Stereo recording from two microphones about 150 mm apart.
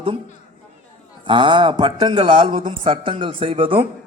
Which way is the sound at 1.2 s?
35° right (ahead or behind).